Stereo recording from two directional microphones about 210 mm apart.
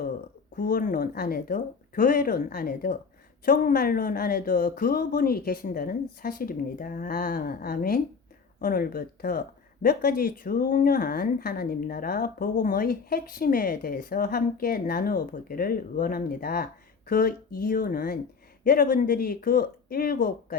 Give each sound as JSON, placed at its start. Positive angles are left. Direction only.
{"t": 0.5, "sound": "a woman's voice", "side_deg": 40}